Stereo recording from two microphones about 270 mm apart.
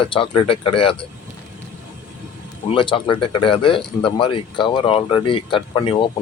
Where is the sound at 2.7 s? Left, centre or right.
Centre.